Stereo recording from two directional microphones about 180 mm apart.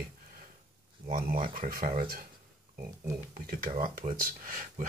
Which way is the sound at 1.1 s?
50° right (ahead or behind).